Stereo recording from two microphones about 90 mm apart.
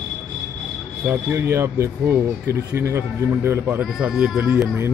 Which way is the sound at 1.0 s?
25° right (ahead or behind).